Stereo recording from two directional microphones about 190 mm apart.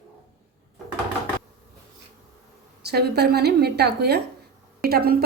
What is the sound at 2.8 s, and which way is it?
A woman's voice, 55° right (ahead or behind).